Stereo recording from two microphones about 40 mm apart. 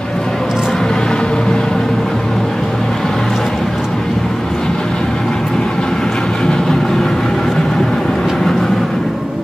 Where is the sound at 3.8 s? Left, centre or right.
Centre.